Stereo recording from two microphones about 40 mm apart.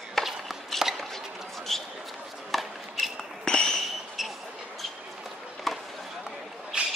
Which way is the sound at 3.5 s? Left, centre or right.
Centre.